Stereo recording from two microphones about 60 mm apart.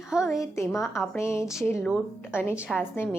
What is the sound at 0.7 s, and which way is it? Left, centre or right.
Speech, centre.